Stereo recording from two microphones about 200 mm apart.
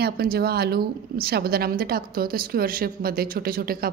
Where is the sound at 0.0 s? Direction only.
50° right (ahead or behind).